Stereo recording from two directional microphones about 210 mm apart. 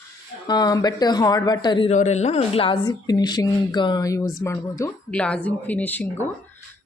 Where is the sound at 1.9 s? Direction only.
35° left (ahead or behind).